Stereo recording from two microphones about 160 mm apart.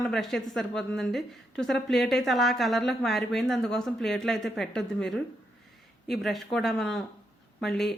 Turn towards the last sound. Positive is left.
turn(degrees=0)  # may be behind; listen again after turning